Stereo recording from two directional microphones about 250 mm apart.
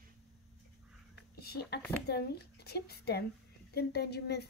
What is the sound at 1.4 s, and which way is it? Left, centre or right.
A woman's voice, left.